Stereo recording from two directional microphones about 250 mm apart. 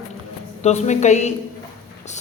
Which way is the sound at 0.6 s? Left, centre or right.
Left.